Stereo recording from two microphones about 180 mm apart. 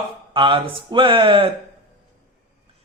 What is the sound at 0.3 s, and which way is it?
A man's voice, 25° right (ahead or behind).